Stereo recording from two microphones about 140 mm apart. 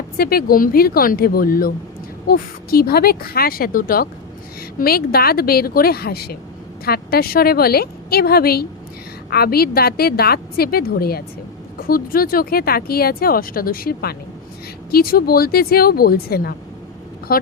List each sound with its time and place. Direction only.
0.2 s speech: 90° left